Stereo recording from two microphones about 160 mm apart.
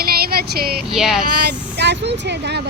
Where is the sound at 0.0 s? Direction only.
70° right (ahead or behind).